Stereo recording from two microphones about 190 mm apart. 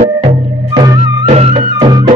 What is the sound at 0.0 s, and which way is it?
Music, 35° right (ahead or behind).